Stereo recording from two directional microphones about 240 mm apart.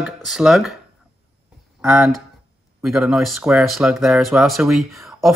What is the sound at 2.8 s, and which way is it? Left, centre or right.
Speech, centre.